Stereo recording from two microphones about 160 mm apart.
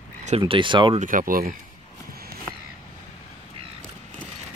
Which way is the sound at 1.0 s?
60° right (ahead or behind).